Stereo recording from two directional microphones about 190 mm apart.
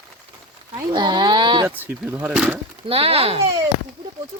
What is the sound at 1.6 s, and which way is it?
Speech, 10° right (ahead or behind).